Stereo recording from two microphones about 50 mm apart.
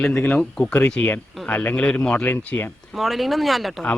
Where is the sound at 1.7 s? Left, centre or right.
Left.